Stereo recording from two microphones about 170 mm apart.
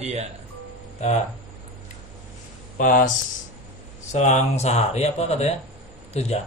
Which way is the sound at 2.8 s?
55° left (ahead or behind).